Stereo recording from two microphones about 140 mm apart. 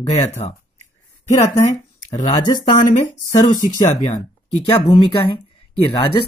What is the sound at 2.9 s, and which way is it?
Speech, 55° left (ahead or behind).